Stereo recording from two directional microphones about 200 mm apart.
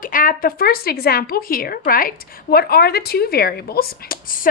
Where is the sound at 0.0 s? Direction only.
45° left (ahead or behind).